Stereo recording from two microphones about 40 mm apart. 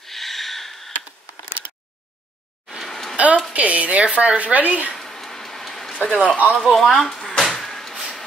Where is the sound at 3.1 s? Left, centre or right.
Right.